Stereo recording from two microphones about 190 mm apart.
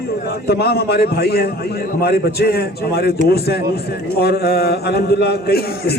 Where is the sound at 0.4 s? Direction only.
55° left (ahead or behind).